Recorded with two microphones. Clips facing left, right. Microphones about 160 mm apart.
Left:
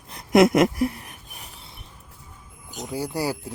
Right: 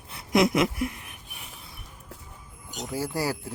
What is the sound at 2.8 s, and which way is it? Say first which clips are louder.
Speech: left 2 dB; 20° left (ahead or behind).